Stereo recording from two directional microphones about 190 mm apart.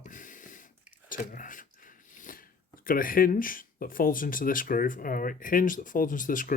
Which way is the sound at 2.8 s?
45° left (ahead or behind).